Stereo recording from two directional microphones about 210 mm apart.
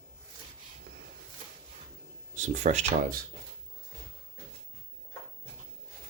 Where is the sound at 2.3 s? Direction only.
35° right (ahead or behind).